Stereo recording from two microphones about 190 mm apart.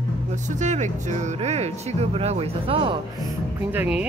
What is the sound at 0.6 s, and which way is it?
Speech, 40° right (ahead or behind).